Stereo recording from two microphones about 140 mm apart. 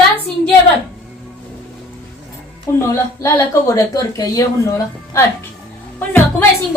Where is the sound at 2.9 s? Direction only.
20° left (ahead or behind).